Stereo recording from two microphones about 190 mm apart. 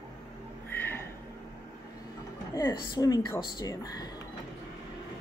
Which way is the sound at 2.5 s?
20° left (ahead or behind).